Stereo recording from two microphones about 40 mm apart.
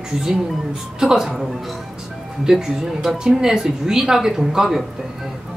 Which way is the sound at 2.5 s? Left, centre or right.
Centre.